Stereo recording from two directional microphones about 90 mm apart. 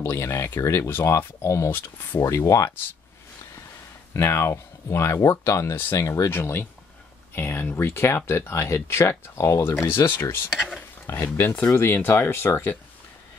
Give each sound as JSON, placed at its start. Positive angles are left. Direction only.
{"t": 0.0, "sound": "speech", "side_deg": 30}
{"t": 4.1, "sound": "speech", "side_deg": 30}